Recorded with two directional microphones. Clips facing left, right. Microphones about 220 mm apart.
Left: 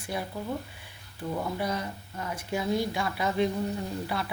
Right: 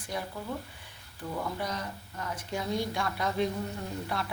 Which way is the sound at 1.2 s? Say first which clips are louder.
Left 4 dB; 25° left (ahead or behind).